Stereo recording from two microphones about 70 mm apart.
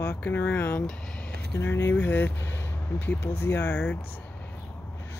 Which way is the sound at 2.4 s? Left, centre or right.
Left.